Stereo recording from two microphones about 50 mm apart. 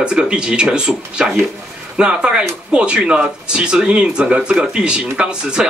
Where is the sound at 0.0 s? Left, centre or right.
Centre.